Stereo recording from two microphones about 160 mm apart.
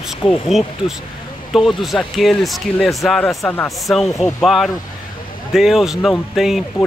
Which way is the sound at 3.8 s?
Centre (ahead or behind).